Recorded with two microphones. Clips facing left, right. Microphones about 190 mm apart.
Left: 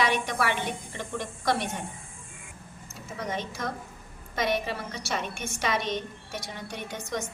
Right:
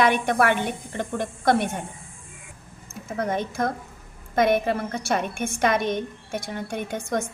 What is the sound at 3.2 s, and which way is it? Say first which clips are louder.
A woman's voice: right 7 dB; 55° right (ahead or behind).